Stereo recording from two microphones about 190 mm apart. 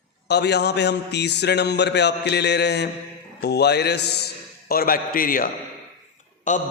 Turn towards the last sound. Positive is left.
turn(degrees=40)  # may be behind; listen again after turning